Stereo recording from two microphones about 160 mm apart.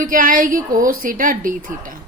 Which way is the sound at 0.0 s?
60° right (ahead or behind).